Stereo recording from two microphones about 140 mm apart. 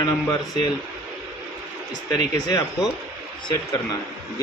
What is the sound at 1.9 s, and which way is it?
Speech, 30° left (ahead or behind).